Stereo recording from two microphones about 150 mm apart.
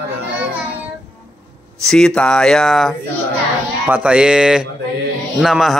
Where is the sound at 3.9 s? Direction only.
5° right (ahead or behind).